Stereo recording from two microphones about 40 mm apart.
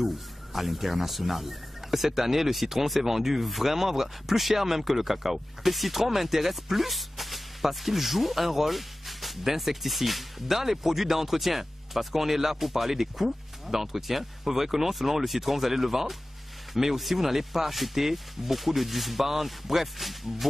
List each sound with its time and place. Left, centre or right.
0.0 s speech: centre